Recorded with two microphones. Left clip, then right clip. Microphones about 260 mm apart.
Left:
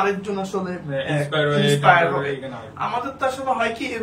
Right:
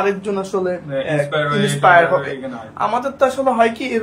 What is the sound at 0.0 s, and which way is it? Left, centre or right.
Speech, centre.